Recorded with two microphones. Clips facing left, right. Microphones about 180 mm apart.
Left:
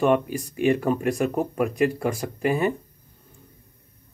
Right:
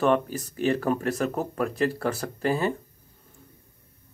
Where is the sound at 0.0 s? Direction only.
10° left (ahead or behind).